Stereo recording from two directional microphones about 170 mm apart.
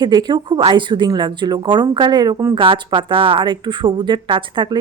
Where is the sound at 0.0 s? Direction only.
25° right (ahead or behind).